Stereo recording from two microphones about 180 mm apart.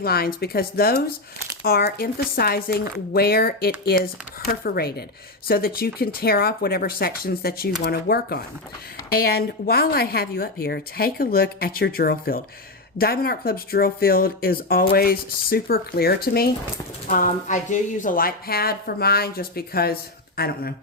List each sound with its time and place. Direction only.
0.0 s a woman's voice: 55° left (ahead or behind)
17.1 s a woman's voice: 45° left (ahead or behind)